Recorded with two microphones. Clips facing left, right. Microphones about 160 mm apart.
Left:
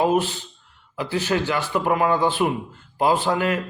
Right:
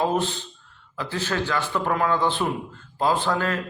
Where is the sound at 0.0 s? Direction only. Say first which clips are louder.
Left 3 dB; 10° left (ahead or behind).